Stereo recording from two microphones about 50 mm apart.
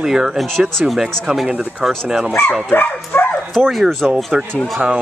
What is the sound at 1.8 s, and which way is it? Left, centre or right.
Speech, centre.